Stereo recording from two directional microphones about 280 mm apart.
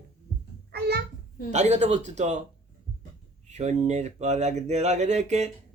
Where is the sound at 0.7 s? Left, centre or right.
Right.